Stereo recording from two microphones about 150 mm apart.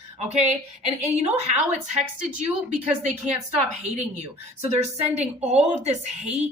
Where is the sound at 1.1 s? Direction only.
50° right (ahead or behind).